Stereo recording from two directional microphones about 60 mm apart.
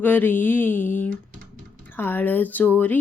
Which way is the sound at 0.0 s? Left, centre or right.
Left.